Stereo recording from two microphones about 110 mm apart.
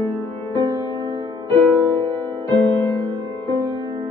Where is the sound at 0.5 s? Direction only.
50° right (ahead or behind).